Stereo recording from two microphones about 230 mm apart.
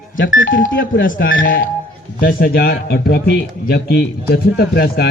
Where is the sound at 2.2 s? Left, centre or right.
Left.